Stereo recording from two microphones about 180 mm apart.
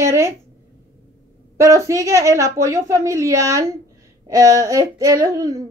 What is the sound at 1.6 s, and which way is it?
A woman's voice, 15° right (ahead or behind).